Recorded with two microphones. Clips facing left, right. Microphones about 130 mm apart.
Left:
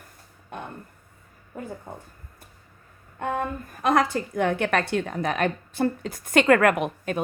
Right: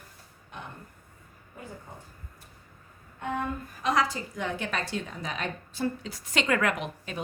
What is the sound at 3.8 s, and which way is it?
A woman's voice, 55° left (ahead or behind).